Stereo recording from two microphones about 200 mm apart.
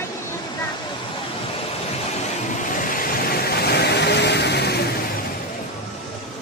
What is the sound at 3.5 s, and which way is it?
Vehicle, 55° left (ahead or behind).